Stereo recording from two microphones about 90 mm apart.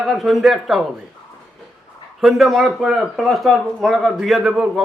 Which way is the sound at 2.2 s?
5° right (ahead or behind).